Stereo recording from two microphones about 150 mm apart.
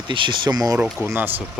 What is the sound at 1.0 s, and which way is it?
Speech, 10° right (ahead or behind).